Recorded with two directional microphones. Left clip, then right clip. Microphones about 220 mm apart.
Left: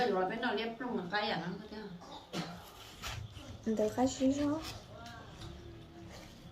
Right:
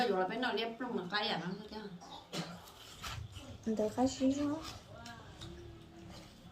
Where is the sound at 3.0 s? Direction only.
5° left (ahead or behind).